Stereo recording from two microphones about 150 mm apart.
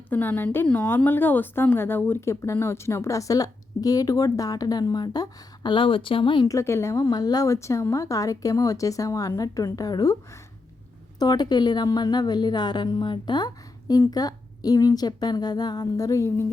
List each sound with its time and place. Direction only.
0.1 s a woman's voice: 10° left (ahead or behind)